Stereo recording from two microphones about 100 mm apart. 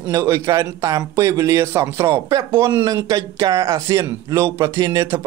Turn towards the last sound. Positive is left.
turn(degrees=-35)  # may be behind; listen again after turning